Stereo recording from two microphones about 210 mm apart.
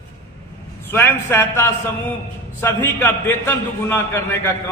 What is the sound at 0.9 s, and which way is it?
A man's voice, 10° left (ahead or behind).